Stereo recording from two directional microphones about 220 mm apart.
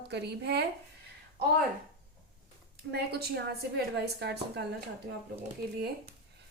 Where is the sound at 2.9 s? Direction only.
45° right (ahead or behind).